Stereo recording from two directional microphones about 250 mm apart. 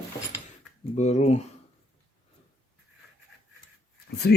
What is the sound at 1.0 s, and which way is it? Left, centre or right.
Speech, left.